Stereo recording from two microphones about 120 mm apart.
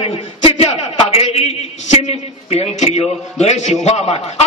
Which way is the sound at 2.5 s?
60° left (ahead or behind).